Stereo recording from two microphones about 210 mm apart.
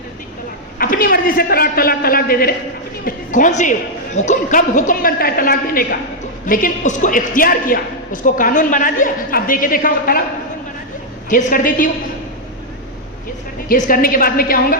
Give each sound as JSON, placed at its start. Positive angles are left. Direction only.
{"t": 0.8, "sound": "a man's voice", "side_deg": 45}
{"t": 11.3, "sound": "a man's voice", "side_deg": 40}
{"t": 13.7, "sound": "a man's voice", "side_deg": 40}